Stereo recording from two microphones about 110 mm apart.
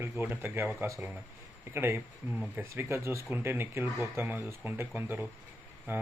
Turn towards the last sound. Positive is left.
turn(degrees=-20)  # may be behind; listen again after turning